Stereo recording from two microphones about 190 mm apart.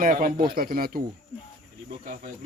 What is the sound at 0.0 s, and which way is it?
Speech, 45° right (ahead or behind).